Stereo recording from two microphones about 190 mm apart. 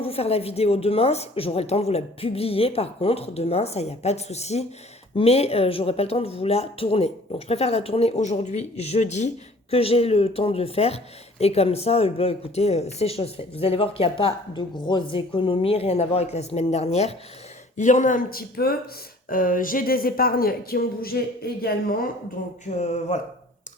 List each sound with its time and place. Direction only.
0.0 s speech: 30° left (ahead or behind); by 22.1 s 50° left (ahead or behind)
22.9 s speech: 40° left (ahead or behind)